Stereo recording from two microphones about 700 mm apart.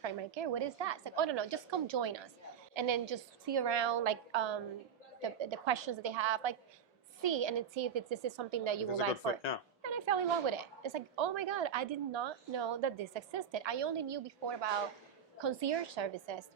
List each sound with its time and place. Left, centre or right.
0.0 s a woman's voice: right